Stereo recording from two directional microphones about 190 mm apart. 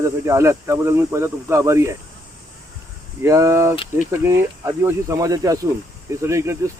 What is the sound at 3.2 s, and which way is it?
Speech, 15° right (ahead or behind).